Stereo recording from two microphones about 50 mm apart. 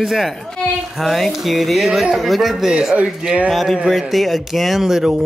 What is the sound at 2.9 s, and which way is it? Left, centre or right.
Speech, right.